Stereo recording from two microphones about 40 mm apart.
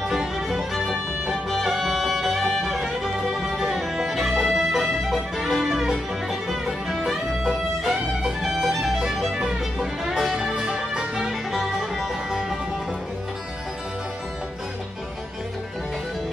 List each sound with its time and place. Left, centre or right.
0.1 s music: centre
10.3 s music: centre